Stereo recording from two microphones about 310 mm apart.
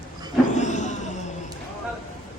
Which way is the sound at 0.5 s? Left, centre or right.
Left.